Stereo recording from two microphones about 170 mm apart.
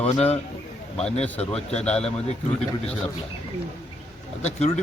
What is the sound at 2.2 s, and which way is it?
Speech, 40° left (ahead or behind).